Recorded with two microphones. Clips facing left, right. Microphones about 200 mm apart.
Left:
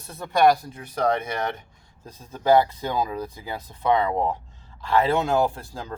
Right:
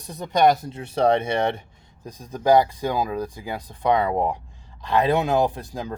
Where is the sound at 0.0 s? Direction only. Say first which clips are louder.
Even; 15° right (ahead or behind).